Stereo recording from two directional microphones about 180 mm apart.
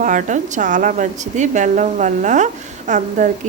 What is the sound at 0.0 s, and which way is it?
A woman's voice, 45° right (ahead or behind).